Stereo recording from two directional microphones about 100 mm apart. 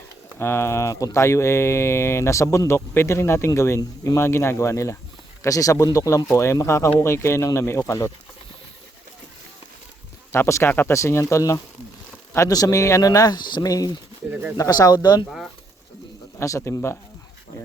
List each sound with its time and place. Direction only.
0.3 s speech: 25° left (ahead or behind)
10.3 s speech: 25° left (ahead or behind); by 15.3 s 45° left (ahead or behind)
16.4 s speech: 30° left (ahead or behind)